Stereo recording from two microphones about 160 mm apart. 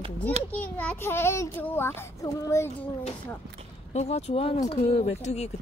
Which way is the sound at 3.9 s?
45° left (ahead or behind).